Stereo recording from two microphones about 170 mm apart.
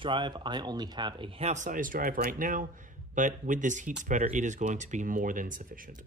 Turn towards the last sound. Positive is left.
turn(degrees=-50)  # may be behind; listen again after turning